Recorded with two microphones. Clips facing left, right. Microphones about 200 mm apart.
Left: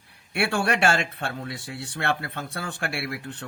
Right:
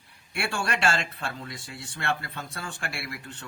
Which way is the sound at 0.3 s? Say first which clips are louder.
Left 6 dB; 60° left (ahead or behind).